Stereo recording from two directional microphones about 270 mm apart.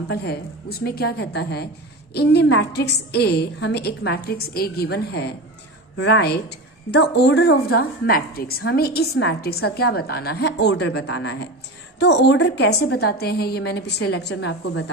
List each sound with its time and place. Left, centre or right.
0.1 s a woman's voice: left